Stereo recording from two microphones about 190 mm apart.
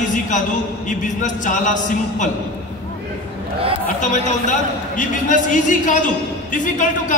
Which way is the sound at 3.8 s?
40° left (ahead or behind).